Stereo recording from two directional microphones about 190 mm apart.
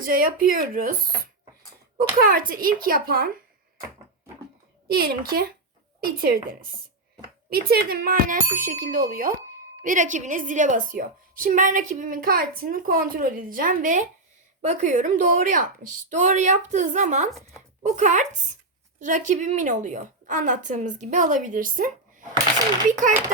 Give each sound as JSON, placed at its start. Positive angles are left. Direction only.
{"t": 0.0, "sound": "a woman's voice", "side_deg": -45}
{"t": 2.0, "sound": "a woman's voice", "side_deg": -50}
{"t": 4.9, "sound": "a woman's voice", "side_deg": -50}